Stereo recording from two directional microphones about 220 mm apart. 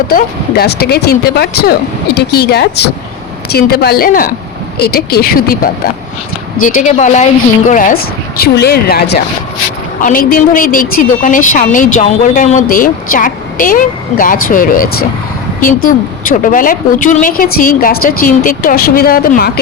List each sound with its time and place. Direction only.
0.1 s speech: 45° left (ahead or behind)
6.8 s a woman's voice: 30° left (ahead or behind)